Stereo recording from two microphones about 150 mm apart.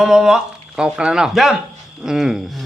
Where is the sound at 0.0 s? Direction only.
5° right (ahead or behind).